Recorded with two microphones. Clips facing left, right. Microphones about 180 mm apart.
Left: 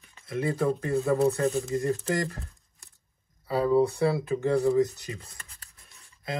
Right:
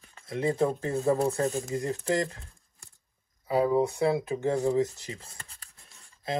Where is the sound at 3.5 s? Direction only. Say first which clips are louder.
Left 1 dB; 15° right (ahead or behind).